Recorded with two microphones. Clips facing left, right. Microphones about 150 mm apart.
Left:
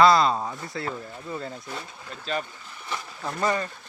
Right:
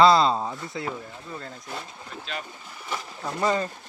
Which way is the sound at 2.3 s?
40° left (ahead or behind).